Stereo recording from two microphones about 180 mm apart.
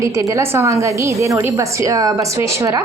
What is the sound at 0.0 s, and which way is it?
A woman's voice, 15° right (ahead or behind).